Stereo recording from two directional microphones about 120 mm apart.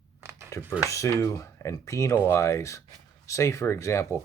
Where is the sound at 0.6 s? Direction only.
20° right (ahead or behind).